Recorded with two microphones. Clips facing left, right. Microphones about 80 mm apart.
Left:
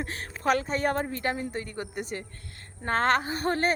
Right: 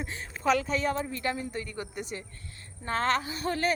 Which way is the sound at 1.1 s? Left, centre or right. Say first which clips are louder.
Left 2 dB; left.